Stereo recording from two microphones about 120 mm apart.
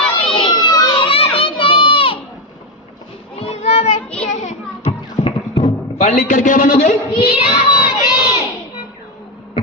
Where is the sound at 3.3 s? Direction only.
60° left (ahead or behind).